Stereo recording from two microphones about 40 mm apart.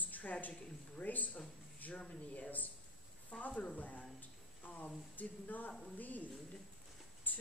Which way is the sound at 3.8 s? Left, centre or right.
Left.